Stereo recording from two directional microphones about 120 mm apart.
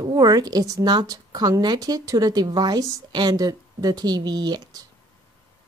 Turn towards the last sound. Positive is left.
turn(degrees=-35)  # may be behind; listen again after turning